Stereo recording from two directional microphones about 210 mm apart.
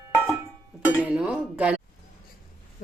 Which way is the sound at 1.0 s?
5° right (ahead or behind).